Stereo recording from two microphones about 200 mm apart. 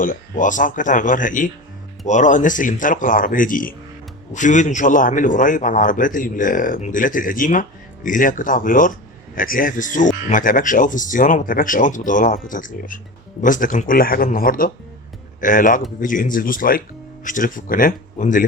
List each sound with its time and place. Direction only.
0.0 s a man's voice: 40° left (ahead or behind)